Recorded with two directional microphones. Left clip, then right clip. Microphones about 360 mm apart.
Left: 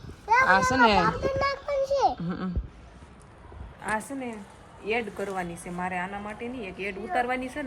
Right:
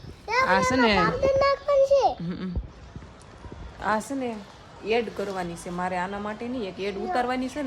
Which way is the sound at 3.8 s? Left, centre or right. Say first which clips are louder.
Right 4 dB; centre.